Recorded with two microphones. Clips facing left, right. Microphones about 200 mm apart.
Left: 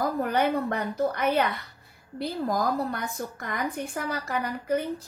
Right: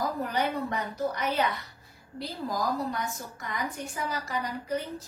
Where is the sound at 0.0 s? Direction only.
55° left (ahead or behind).